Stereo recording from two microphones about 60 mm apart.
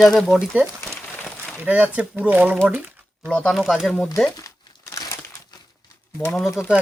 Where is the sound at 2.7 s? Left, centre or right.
Right.